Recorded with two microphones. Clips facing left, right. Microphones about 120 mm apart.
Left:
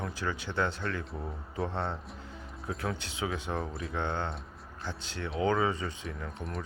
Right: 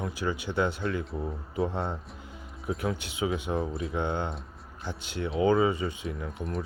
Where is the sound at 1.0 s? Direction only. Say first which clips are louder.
Right 5 dB; centre (ahead or behind).